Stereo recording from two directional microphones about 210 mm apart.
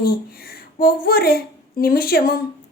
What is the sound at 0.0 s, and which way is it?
A woman's voice, 45° left (ahead or behind).